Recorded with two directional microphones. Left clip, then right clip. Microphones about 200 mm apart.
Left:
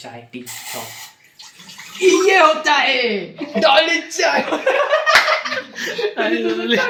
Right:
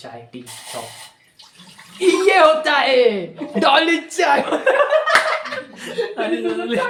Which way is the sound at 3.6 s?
40° right (ahead or behind).